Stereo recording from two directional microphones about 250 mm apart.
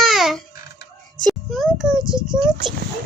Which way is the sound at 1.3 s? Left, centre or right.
Centre.